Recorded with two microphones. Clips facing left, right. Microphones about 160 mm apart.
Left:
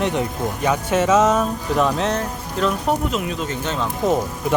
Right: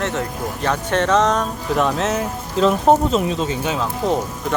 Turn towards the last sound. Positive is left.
turn(degrees=-5)  # may be behind; listen again after turning